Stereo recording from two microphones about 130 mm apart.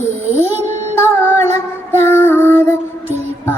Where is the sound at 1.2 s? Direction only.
20° left (ahead or behind).